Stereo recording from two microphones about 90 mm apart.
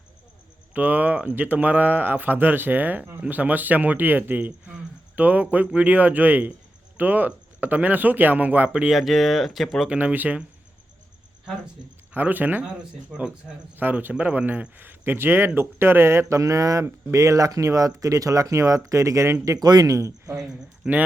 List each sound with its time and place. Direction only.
0.7 s speech: 20° right (ahead or behind)
9.0 s speech: centre (ahead or behind)
9.9 s speech: 15° right (ahead or behind)
12.1 s speech: 20° right (ahead or behind)
13.7 s speech: 20° right (ahead or behind)
19.5 s speech: 50° right (ahead or behind)
20.5 s speech: 15° right (ahead or behind)